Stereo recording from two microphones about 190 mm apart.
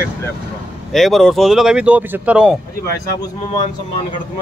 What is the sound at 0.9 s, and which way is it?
Speech, centre (ahead or behind).